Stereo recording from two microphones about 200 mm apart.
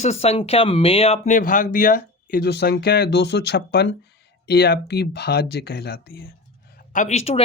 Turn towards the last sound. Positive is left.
turn(degrees=35)  # may be behind; listen again after turning